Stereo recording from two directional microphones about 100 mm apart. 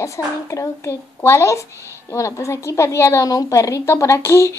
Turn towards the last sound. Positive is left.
turn(degrees=30)  # may be behind; listen again after turning